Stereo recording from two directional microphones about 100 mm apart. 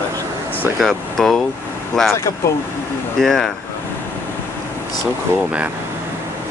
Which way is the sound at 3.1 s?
5° left (ahead or behind).